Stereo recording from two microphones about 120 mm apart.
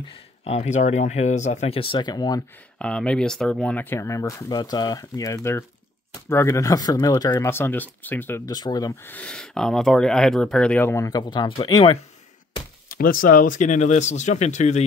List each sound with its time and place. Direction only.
0.1 s speech: 60° left (ahead or behind); by 1.8 s 75° left (ahead or behind)
1.8 s speech: 45° left (ahead or behind)
2.8 s speech: 10° left (ahead or behind); by 7.4 s 30° left (ahead or behind)
7.4 s speech: 20° left (ahead or behind)
8.5 s speech: 35° left (ahead or behind)
9.0 s speech: 10° left (ahead or behind)
11.1 s speech: 35° left (ahead or behind)
13.5 s speech: 90° left; by 14.9 s 75° left (ahead or behind)